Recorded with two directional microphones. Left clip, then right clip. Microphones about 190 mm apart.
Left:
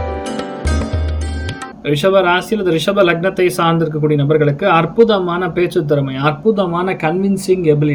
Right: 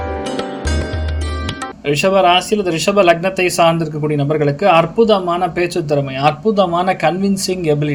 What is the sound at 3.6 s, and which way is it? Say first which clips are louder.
Speech: right 1 dB; 40° right (ahead or behind).